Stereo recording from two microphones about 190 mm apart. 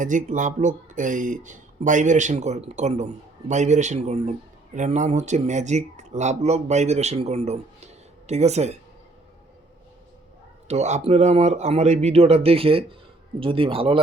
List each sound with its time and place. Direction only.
0.0 s speech: 40° right (ahead or behind)
10.7 s a man's voice: 35° right (ahead or behind)